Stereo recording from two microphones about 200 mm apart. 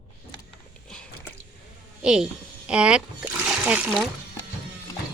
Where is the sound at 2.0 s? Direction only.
5° right (ahead or behind).